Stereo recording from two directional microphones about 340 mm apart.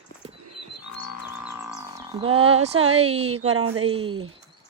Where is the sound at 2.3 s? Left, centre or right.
Centre.